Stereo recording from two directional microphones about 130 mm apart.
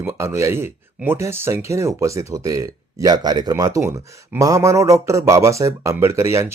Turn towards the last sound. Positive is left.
turn(degrees=-20)  # may be behind; listen again after turning